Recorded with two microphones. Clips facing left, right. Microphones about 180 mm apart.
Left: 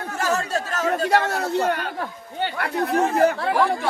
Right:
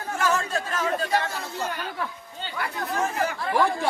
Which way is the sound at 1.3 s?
70° left (ahead or behind).